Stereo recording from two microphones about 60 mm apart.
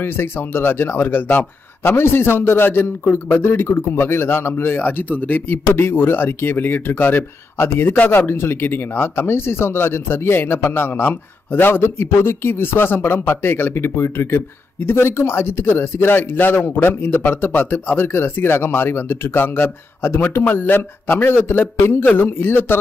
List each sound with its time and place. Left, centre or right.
0.0 s speech: left